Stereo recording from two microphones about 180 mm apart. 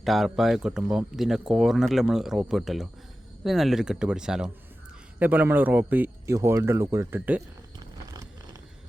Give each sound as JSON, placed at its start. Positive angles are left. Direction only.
{"t": 0.0, "sound": "speech", "side_deg": 0}